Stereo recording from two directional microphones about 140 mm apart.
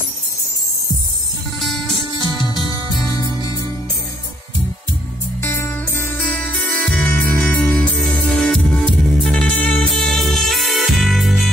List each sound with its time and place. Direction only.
2.1 s music: 35° left (ahead or behind)
5.4 s music: 15° left (ahead or behind); by 11.4 s centre (ahead or behind)